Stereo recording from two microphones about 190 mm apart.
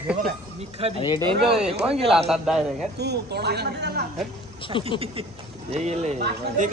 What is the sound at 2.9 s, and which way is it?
Speech, 60° right (ahead or behind).